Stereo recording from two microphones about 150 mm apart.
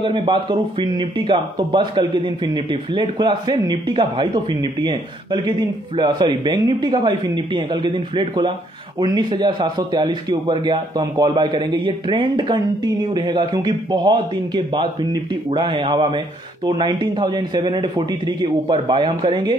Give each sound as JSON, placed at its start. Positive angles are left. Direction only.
{"t": 0.0, "sound": "speech", "side_deg": -35}